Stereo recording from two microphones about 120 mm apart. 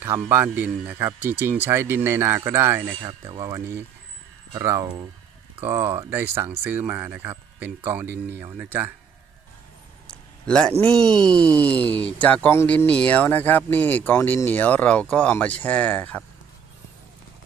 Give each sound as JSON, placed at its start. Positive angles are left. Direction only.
{"t": 0.0, "sound": "speech", "side_deg": -20}
{"t": 10.0, "sound": "a sound", "side_deg": 5}
{"t": 10.9, "sound": "speech", "side_deg": 10}